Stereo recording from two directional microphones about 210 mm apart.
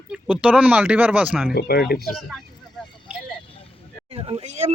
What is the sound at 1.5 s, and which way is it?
Speech, 50° left (ahead or behind).